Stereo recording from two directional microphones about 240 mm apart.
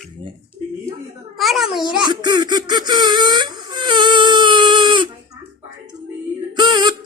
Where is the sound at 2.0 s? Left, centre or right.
Centre.